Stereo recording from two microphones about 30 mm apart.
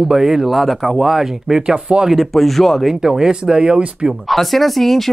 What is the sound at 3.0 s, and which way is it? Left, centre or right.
Speech, right.